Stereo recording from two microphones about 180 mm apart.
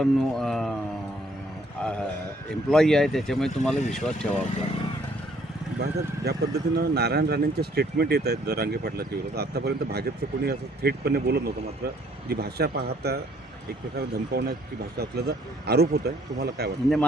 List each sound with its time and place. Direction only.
0.0 s speech: 5° left (ahead or behind)
1.8 s a sound: 5° left (ahead or behind)
2.6 s speech: 5° left (ahead or behind)
5.8 s speech: 65° right (ahead or behind)